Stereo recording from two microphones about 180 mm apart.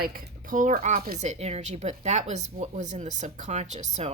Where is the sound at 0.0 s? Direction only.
50° right (ahead or behind).